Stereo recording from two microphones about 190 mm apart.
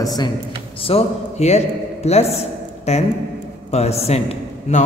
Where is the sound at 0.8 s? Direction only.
30° left (ahead or behind).